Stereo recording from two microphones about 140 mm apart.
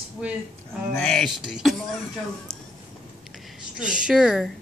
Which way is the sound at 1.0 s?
5° left (ahead or behind).